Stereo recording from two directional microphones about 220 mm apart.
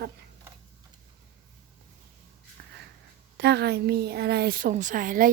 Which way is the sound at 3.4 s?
50° right (ahead or behind).